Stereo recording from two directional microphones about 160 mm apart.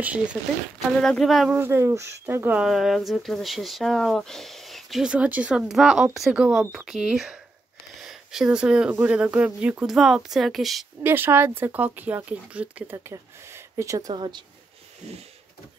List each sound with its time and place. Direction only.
0.0 s speech: 10° right (ahead or behind)
0.9 s speech: centre (ahead or behind)
1.6 s speech: 15° right (ahead or behind); by 10.9 s centre (ahead or behind)
11.0 s speech: 15° right (ahead or behind); by 14.4 s 30° right (ahead or behind)